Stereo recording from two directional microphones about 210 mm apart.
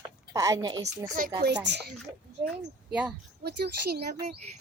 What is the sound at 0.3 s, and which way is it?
Speech, 15° right (ahead or behind).